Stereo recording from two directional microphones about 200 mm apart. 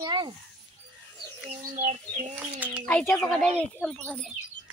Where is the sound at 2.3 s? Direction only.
10° right (ahead or behind).